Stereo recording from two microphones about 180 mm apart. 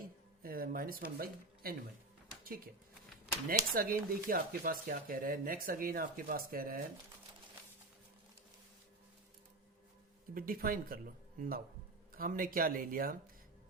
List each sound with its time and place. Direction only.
0.4 s speech: 55° right (ahead or behind)
2.4 s a sound: 55° right (ahead or behind)
3.5 s speech: 50° right (ahead or behind)
10.3 s speech: 50° right (ahead or behind)